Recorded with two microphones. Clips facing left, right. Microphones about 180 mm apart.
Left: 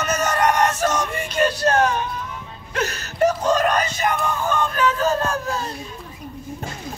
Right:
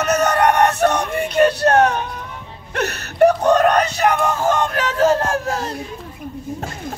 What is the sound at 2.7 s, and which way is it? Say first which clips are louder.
Speech: right 3 dB; 65° right (ahead or behind).